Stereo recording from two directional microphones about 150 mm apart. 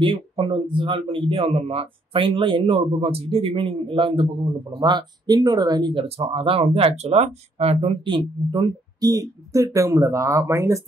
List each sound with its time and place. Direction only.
0.0 s speech: 35° right (ahead or behind); by 10.8 s 20° right (ahead or behind)